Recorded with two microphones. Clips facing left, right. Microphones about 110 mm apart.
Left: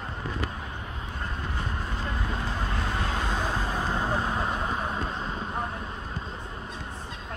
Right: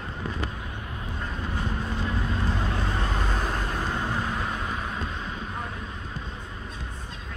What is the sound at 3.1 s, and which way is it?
Vehicle, centre (ahead or behind).